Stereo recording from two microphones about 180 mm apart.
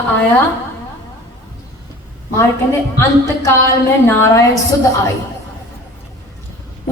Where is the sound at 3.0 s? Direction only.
15° left (ahead or behind).